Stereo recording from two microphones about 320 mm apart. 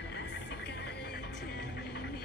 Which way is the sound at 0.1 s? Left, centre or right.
Left.